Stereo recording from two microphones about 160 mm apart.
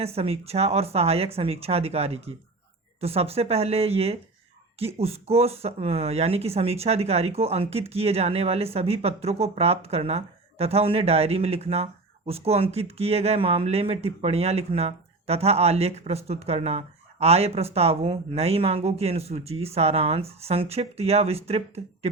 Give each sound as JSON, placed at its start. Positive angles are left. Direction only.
{"t": 0.0, "sound": "speech", "side_deg": -40}